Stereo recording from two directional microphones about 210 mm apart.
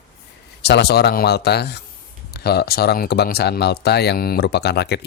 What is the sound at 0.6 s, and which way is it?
Speech, 50° left (ahead or behind).